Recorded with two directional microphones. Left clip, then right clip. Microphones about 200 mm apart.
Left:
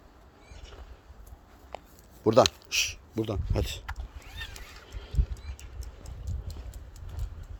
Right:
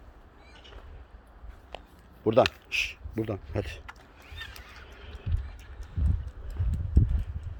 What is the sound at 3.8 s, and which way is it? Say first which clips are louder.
Horse: left 3 dB; 35° left (ahead or behind).